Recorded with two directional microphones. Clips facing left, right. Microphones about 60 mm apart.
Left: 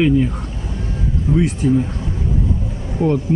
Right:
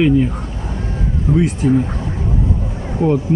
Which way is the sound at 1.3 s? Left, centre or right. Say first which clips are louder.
Right 1 dB; right.